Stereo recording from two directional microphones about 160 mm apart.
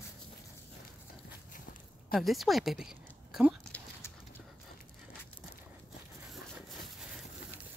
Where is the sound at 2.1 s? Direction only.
Centre (ahead or behind).